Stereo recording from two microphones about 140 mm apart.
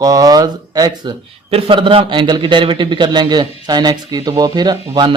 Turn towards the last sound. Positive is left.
turn(degrees=-30)  # may be behind; listen again after turning